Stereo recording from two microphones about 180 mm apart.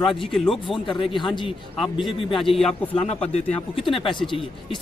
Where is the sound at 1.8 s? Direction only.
Centre (ahead or behind).